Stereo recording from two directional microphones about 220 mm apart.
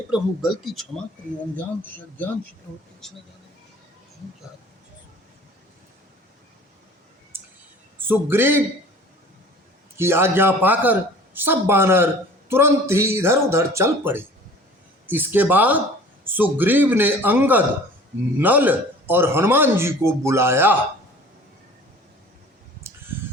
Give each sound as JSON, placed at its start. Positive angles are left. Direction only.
{"t": 0.1, "sound": "a man's voice", "side_deg": 0}
{"t": 7.3, "sound": "music", "side_deg": -10}
{"t": 7.9, "sound": "a man's voice", "side_deg": -10}
{"t": 10.0, "sound": "a man's voice", "side_deg": -10}